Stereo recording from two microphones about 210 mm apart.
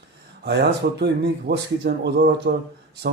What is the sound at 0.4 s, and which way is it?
Speech, 50° right (ahead or behind).